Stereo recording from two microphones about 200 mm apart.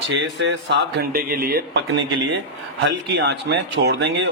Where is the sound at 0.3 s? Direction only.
60° right (ahead or behind).